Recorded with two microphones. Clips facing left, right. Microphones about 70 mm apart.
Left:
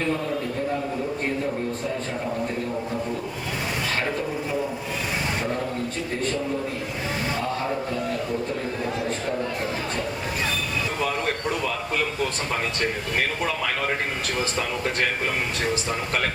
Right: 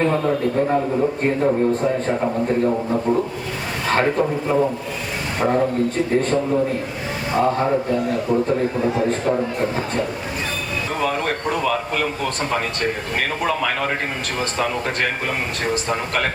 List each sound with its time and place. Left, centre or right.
0.0 s a man's voice: right
3.8 s a man's voice: right
11.5 s speech: right
13.5 s a man's voice: right
15.7 s a man's voice: right